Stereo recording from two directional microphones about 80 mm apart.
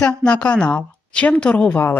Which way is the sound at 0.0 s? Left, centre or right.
Centre.